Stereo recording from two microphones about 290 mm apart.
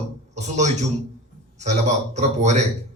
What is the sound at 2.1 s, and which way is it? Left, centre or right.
Speech, right.